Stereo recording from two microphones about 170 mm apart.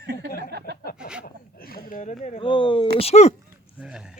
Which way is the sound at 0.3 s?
60° left (ahead or behind).